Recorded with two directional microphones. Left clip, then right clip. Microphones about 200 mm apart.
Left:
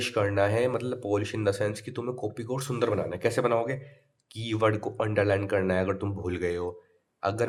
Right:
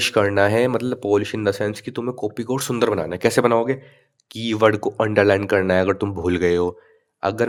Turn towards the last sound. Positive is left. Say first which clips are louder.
# right 7 dB
turn(degrees=-40)  # may be behind; listen again after turning